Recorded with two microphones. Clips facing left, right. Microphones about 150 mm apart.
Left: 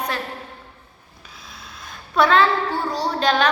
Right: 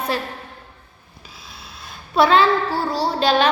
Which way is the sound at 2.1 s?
30° right (ahead or behind).